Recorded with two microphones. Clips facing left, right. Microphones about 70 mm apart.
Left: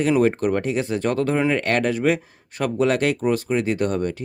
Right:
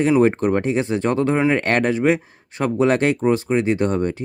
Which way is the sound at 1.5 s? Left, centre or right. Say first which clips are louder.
Right 2 dB; right.